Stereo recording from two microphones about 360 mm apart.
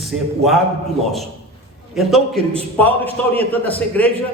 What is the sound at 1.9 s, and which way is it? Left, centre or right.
A man's voice, centre.